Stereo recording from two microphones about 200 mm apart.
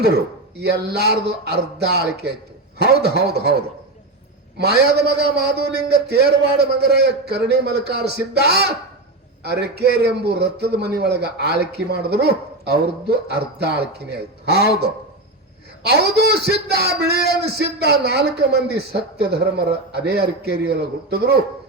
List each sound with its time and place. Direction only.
0.0 s a man's voice: 55° right (ahead or behind)
4.5 s a man's voice: 55° right (ahead or behind)